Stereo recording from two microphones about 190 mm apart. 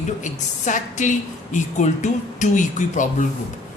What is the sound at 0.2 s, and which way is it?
Speech, 40° left (ahead or behind).